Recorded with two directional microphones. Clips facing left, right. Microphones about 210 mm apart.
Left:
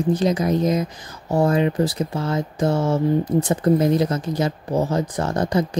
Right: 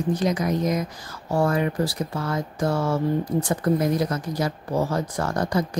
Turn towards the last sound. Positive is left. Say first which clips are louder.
# left 3 dB
turn(degrees=25)  # may be behind; listen again after turning